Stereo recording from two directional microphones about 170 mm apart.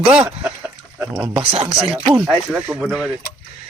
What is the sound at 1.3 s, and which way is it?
Speech, 30° right (ahead or behind).